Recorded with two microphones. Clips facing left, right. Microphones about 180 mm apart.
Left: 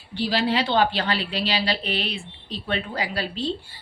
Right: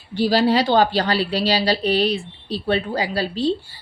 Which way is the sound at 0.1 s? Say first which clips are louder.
Right 6 dB; 45° right (ahead or behind).